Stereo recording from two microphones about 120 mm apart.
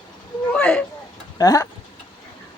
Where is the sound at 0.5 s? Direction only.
10° left (ahead or behind).